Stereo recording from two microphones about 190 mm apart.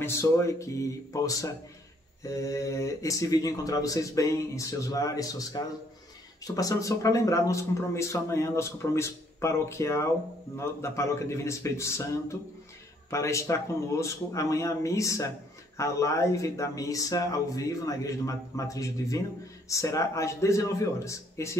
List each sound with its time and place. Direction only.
0.0 s speech: 15° left (ahead or behind)